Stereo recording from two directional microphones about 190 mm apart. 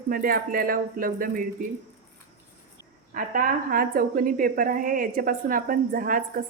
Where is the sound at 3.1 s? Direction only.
50° right (ahead or behind).